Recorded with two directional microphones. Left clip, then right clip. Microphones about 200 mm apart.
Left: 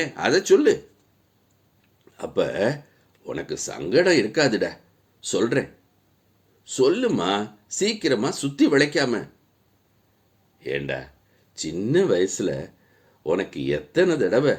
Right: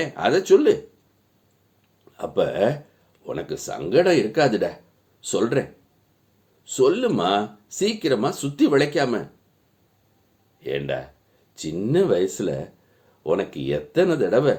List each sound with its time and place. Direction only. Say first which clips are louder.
0.0 s speech: right 1 dB; 40° left (ahead or behind)
2.1 s speech: right 2 dB; 35° left (ahead or behind)
6.7 s speech: right 1 dB; 35° left (ahead or behind)
10.6 s speech: right 1 dB; 35° left (ahead or behind)